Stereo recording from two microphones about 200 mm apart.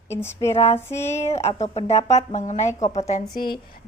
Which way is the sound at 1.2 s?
35° left (ahead or behind).